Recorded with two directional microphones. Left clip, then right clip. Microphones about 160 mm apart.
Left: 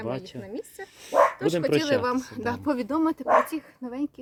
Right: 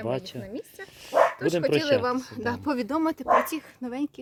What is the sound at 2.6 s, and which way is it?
Speech, 25° right (ahead or behind).